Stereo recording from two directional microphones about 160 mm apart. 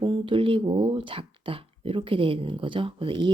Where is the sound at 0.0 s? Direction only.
35° right (ahead or behind).